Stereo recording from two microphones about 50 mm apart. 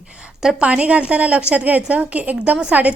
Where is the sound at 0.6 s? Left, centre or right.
Right.